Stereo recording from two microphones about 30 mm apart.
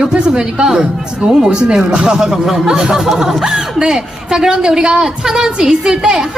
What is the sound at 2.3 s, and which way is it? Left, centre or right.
Speech, centre.